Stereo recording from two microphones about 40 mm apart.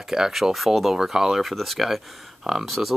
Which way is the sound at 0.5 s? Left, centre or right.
Centre.